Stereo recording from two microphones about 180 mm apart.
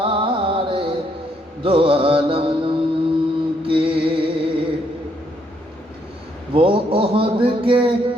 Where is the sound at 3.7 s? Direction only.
30° right (ahead or behind).